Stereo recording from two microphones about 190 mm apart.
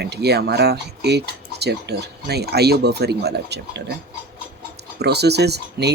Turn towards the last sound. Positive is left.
turn(degrees=-60)  # may be behind; listen again after turning